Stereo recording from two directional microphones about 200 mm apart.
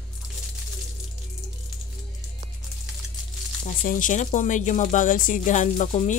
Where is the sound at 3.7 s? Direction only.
40° left (ahead or behind).